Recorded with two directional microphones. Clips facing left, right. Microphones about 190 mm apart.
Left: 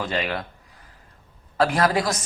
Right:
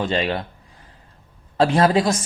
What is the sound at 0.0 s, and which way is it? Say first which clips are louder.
Speech: right 4 dB; 30° right (ahead or behind).